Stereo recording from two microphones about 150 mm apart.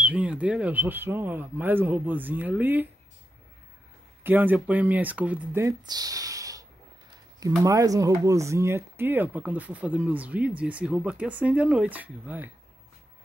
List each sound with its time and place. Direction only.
0.0 s speech: 10° right (ahead or behind)
4.2 s speech: 10° right (ahead or behind)